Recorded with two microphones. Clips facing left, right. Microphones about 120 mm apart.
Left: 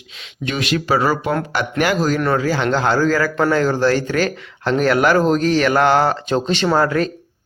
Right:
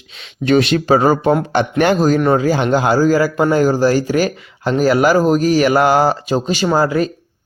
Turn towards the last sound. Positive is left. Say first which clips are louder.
# right 2 dB
turn(degrees=-5)  # may be behind; listen again after turning